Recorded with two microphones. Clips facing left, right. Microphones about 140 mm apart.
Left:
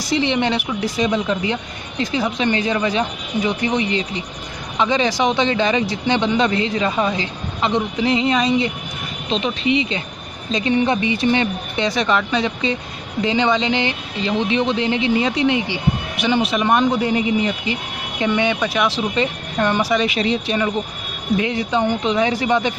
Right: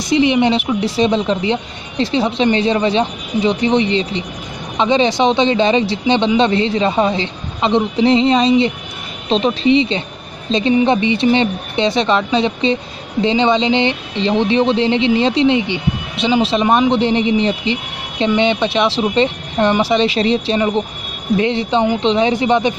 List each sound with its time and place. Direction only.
0.1 s speech: 15° right (ahead or behind)